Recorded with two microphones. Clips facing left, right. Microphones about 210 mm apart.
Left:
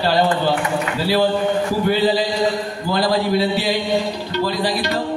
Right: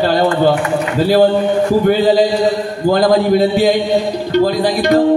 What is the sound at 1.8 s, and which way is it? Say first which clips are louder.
A man's voice: right 4 dB; 45° right (ahead or behind).